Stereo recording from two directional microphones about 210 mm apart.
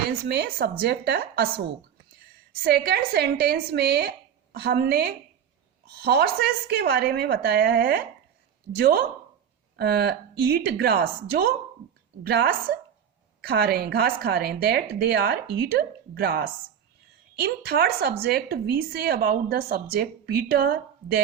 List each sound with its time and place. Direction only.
0.3 s speech: 50° right (ahead or behind)
2.6 s speech: 50° right (ahead or behind)
17.4 s speech: 50° right (ahead or behind)